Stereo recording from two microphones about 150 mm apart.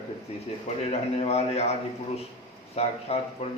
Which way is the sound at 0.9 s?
45° left (ahead or behind).